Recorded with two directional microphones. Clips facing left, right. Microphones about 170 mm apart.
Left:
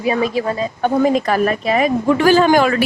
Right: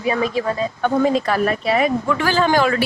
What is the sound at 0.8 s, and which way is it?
A woman's voice, 15° left (ahead or behind).